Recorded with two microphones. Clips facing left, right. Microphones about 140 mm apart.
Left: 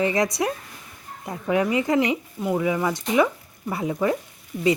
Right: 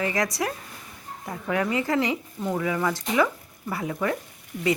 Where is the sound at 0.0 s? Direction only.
20° left (ahead or behind).